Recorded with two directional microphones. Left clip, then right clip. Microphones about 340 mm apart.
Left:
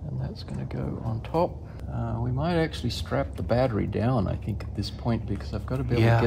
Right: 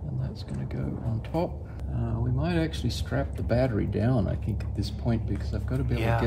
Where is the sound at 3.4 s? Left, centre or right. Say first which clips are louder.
Left 1 dB; centre.